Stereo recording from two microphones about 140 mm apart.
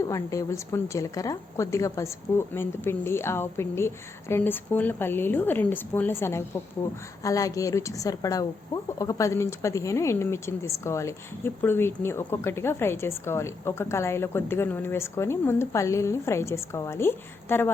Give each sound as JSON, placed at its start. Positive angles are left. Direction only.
{"t": 0.0, "sound": "a woman's voice", "side_deg": 20}